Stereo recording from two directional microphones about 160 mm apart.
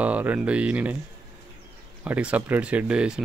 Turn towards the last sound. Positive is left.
turn(degrees=-5)  # may be behind; listen again after turning